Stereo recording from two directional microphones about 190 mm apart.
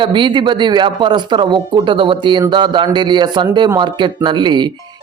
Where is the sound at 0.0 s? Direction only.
25° right (ahead or behind).